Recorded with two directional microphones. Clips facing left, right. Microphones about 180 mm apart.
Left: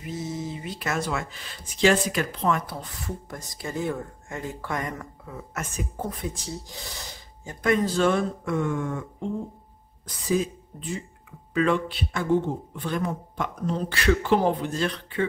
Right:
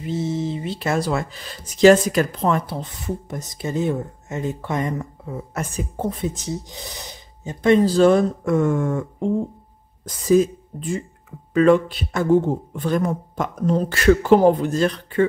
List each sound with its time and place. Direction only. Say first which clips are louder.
0.0 s speech: right 8 dB; 25° right (ahead or behind); by 15.2 s 45° right (ahead or behind)